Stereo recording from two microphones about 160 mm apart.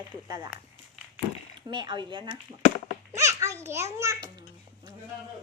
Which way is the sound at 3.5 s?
15° right (ahead or behind).